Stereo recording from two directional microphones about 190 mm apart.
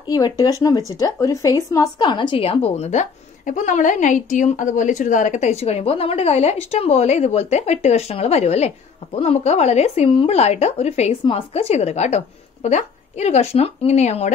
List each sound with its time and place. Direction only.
0.1 s a woman's voice: 20° left (ahead or behind); by 14.3 s 35° left (ahead or behind)